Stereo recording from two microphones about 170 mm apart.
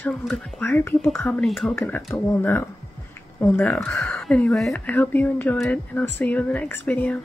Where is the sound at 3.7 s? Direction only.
Centre (ahead or behind).